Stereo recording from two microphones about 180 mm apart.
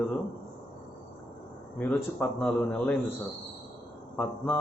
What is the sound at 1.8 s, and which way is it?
Speech, 5° left (ahead or behind).